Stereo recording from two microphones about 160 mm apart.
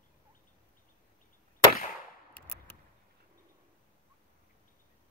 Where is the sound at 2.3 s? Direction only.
15° left (ahead or behind).